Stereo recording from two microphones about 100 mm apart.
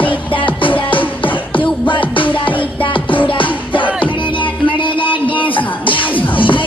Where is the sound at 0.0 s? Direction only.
60° left (ahead or behind).